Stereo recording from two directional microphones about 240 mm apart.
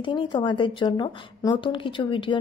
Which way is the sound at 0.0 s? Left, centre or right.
Centre.